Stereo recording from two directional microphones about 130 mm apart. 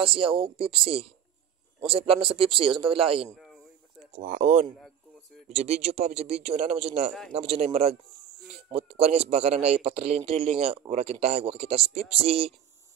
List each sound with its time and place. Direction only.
0.0 s a man's voice: 45° right (ahead or behind)
4.1 s a man's voice: 70° right (ahead or behind); by 12.5 s 50° right (ahead or behind)